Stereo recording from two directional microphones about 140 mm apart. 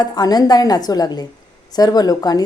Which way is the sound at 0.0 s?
30° left (ahead or behind).